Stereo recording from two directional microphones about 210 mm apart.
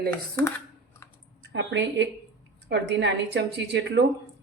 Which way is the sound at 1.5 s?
60° right (ahead or behind).